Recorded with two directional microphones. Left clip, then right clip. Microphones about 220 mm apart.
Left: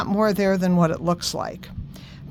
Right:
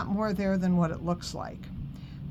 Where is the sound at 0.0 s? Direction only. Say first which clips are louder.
Left 10 dB; 50° left (ahead or behind).